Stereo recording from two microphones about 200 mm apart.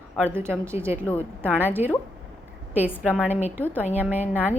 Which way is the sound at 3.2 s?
10° right (ahead or behind).